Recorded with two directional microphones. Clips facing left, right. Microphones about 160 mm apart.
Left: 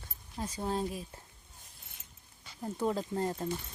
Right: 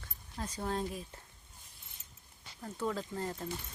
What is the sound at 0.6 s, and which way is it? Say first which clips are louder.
Speech: left 2 dB; 20° left (ahead or behind).